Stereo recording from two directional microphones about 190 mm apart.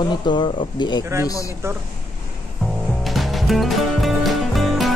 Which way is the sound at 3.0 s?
Centre (ahead or behind).